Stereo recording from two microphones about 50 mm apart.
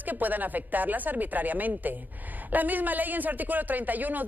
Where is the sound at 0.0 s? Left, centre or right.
Right.